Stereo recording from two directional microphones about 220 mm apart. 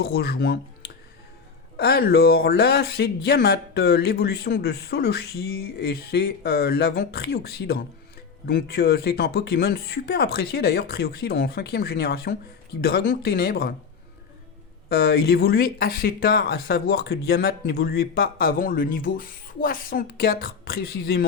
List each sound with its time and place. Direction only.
0.0 s speech: 45° left (ahead or behind)
1.7 s speech: 45° left (ahead or behind)
14.8 s speech: 45° left (ahead or behind)